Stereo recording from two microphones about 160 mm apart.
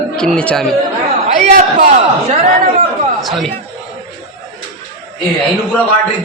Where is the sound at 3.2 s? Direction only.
Centre (ahead or behind).